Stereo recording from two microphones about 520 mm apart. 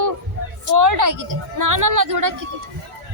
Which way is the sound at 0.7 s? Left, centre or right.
Right.